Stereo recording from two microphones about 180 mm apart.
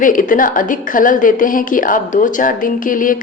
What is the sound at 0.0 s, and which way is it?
Speech, 50° left (ahead or behind).